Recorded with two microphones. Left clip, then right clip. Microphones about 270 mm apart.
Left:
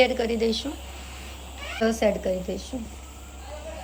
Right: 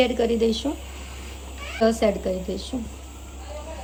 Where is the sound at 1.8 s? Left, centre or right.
Centre.